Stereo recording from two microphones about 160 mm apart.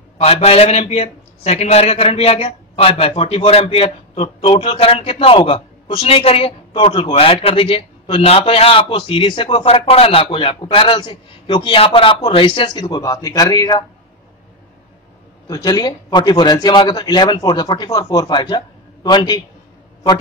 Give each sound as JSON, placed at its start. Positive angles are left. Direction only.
{"t": 0.2, "sound": "a man's voice", "side_deg": 40}
{"t": 15.4, "sound": "a man's voice", "side_deg": 20}